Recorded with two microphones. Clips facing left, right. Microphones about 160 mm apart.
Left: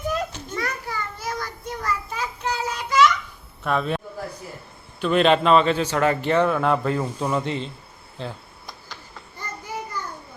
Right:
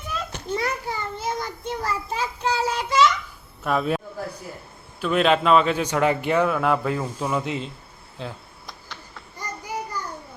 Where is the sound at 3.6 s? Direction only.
5° right (ahead or behind).